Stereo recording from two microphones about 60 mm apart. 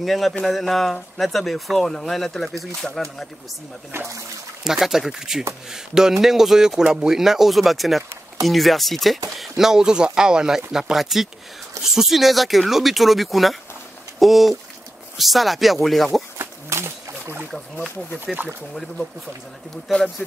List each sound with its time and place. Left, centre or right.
0.0 s speech: centre
4.6 s speech: centre
16.3 s a sound: right
18.2 s speech: right
19.9 s speech: centre